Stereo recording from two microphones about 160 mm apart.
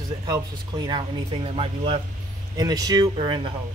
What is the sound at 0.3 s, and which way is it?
Speech, 25° right (ahead or behind).